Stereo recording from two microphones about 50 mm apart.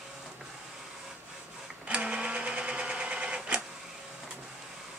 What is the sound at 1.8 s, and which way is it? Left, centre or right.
Sewing machine, right.